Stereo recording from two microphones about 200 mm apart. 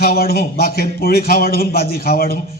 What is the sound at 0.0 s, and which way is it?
A man's voice, 50° left (ahead or behind).